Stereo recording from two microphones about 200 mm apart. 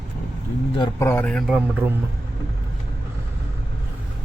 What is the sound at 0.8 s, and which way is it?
Speech, 15° left (ahead or behind).